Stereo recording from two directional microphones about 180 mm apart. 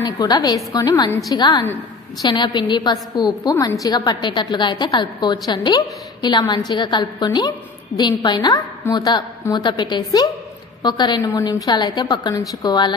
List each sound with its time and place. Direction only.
0.0 s a woman's voice: 25° left (ahead or behind)